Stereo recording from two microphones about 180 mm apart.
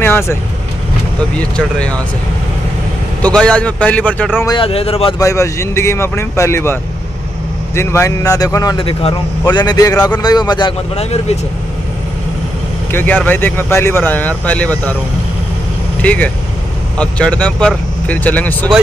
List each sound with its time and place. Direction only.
0.0 s speech: 15° left (ahead or behind)
1.4 s speech: 5° left (ahead or behind)
3.2 s speech: 5° left (ahead or behind)
4.6 s speech: 30° left (ahead or behind)
5.2 s speech: 15° left (ahead or behind)
8.7 s a man's voice: 30° left (ahead or behind)
11.0 s speech: 35° left (ahead or behind)
12.9 s speech: 10° left (ahead or behind)
16.0 s speech: 5° left (ahead or behind)